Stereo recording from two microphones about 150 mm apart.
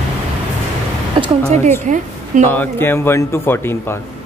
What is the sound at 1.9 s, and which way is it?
Speech, 55° right (ahead or behind).